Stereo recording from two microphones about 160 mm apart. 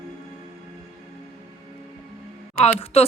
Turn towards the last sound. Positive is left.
turn(degrees=40)  # may be behind; listen again after turning